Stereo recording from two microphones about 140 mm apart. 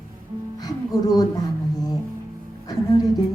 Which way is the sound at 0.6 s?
30° left (ahead or behind).